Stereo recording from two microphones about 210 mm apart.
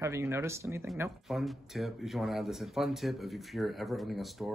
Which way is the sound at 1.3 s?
Centre (ahead or behind).